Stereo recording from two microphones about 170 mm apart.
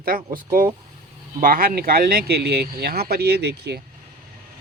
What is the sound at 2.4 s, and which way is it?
Speech, 70° right (ahead or behind).